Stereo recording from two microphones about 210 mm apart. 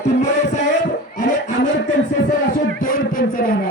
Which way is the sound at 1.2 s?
35° left (ahead or behind).